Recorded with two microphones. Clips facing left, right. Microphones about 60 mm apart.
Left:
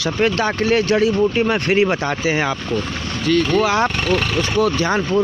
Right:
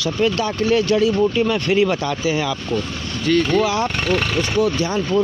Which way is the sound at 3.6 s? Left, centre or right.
Left.